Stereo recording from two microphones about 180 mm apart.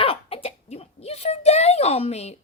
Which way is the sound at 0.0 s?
30° left (ahead or behind).